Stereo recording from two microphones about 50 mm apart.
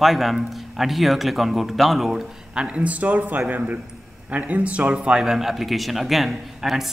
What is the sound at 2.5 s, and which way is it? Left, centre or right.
A man's voice, right.